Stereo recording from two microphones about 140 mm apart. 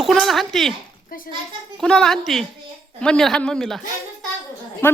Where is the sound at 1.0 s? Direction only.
90° left.